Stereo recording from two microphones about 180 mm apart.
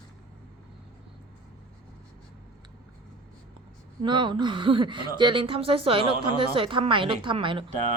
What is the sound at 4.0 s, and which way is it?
A woman's voice, 25° right (ahead or behind).